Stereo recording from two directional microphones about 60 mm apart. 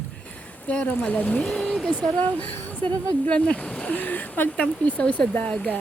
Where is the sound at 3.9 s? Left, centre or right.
Left.